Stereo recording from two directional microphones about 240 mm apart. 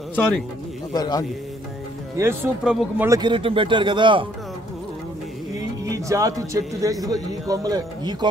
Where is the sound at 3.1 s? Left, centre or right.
Centre.